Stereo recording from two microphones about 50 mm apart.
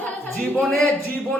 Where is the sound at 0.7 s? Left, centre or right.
Left.